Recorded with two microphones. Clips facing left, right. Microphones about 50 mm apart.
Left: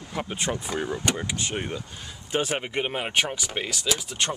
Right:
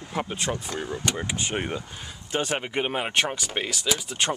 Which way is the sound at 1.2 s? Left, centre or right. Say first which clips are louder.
Right 1 dB; centre.